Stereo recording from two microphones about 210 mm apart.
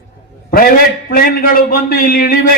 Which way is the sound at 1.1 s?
45° left (ahead or behind).